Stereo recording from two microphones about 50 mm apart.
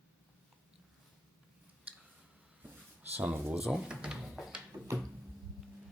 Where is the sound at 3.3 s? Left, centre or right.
Right.